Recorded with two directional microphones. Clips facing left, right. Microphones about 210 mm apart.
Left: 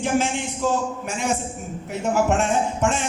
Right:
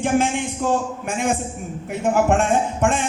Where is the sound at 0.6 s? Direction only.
55° right (ahead or behind).